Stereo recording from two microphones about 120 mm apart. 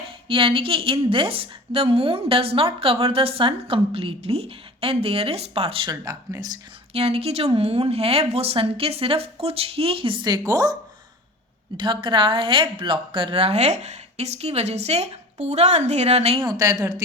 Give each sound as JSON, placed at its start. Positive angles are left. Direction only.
{"t": 0.3, "sound": "a woman's voice", "side_deg": -50}
{"t": 5.9, "sound": "speech", "side_deg": -30}
{"t": 6.9, "sound": "a woman's voice", "side_deg": -55}
{"t": 11.8, "sound": "a woman's voice", "side_deg": -45}
{"t": 16.4, "sound": "speech", "side_deg": -30}